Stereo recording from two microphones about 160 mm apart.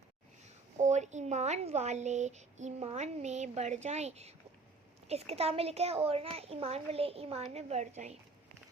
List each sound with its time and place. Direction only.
0.8 s a child's voice: 45° right (ahead or behind)